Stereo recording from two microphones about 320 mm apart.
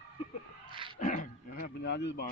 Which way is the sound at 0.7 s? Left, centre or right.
Centre.